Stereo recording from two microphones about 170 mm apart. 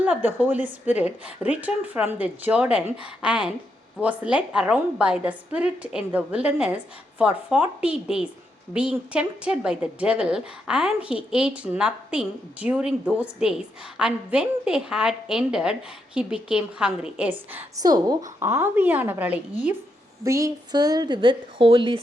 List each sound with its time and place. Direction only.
0.0 s a woman's voice: 10° right (ahead or behind)
17.8 s a woman's voice: 25° right (ahead or behind)